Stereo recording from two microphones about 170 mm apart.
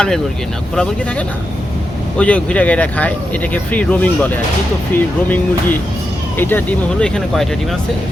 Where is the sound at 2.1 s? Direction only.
10° left (ahead or behind).